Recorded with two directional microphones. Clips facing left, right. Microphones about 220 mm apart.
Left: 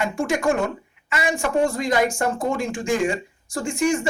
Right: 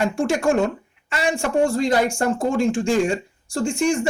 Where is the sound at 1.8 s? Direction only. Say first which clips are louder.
Right 2 dB; 30° right (ahead or behind).